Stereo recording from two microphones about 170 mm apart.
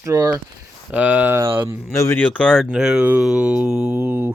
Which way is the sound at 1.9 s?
15° left (ahead or behind).